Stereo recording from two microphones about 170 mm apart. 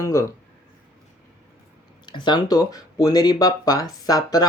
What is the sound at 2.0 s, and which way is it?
Speech, 25° left (ahead or behind).